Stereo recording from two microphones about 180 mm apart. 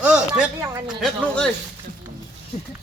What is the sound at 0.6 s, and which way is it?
Speech, 15° right (ahead or behind).